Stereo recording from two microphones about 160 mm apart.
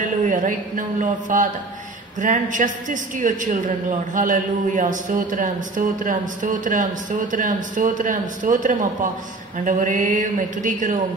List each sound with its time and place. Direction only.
0.2 s a man's voice: 55° right (ahead or behind)